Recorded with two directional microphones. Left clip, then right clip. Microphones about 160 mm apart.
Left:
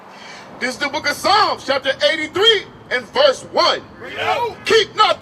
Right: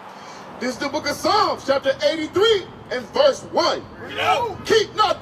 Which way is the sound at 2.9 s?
20° left (ahead or behind).